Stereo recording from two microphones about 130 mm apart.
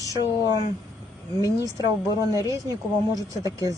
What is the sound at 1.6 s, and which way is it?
Speech, 25° right (ahead or behind).